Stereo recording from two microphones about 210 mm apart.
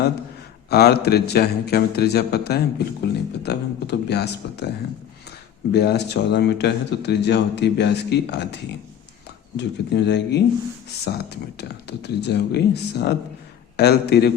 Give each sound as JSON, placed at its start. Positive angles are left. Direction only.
{"t": 0.7, "sound": "speech", "side_deg": 50}
{"t": 5.7, "sound": "speech", "side_deg": 50}
{"t": 9.6, "sound": "speech", "side_deg": 55}